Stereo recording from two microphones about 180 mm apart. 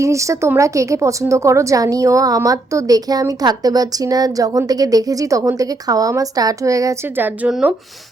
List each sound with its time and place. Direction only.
0.0 s a woman's voice: 15° right (ahead or behind)